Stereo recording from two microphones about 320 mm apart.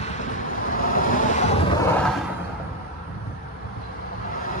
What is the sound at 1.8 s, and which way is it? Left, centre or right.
Vehicle, centre.